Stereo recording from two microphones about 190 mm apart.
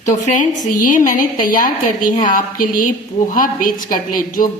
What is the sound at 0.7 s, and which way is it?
A woman's voice, 45° left (ahead or behind).